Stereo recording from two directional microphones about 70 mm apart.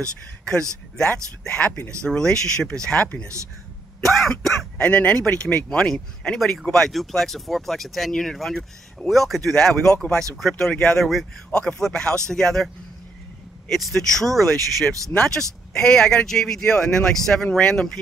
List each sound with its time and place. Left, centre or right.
0.5 s speech: centre
4.0 s throat clearing: centre
4.7 s speech: centre